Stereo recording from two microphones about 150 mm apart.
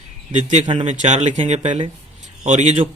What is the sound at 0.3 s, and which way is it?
Speech, 55° right (ahead or behind).